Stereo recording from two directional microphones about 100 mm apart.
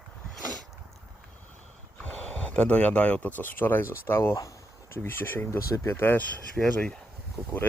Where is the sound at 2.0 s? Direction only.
10° left (ahead or behind).